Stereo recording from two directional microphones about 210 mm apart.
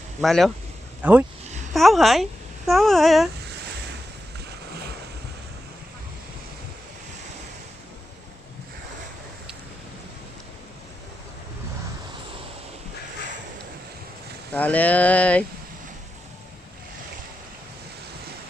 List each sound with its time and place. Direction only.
0.2 s a child's voice: centre (ahead or behind)
14.5 s speech: 5° left (ahead or behind)